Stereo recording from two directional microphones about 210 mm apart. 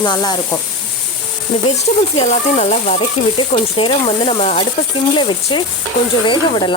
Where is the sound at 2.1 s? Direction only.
35° left (ahead or behind).